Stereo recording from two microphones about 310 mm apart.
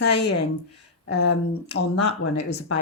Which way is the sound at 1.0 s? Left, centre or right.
Left.